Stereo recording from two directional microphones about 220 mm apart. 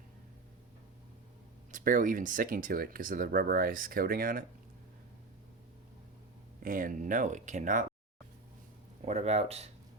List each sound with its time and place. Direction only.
1.7 s speech: 35° right (ahead or behind)
6.6 s speech: 40° right (ahead or behind)
9.0 s speech: 30° right (ahead or behind)